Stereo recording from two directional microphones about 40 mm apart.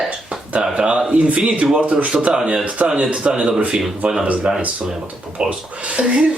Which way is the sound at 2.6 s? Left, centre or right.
Centre.